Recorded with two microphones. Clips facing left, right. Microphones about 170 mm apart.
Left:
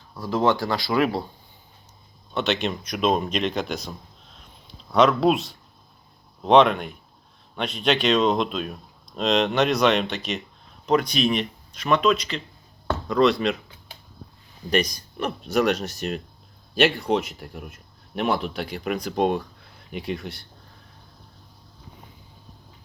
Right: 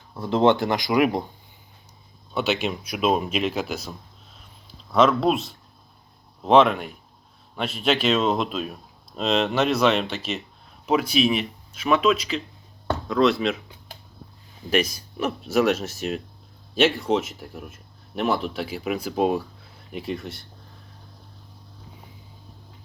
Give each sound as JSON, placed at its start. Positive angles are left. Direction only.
{"t": 0.2, "sound": "speech", "side_deg": -25}
{"t": 2.3, "sound": "speech", "side_deg": -5}
{"t": 14.7, "sound": "speech", "side_deg": -5}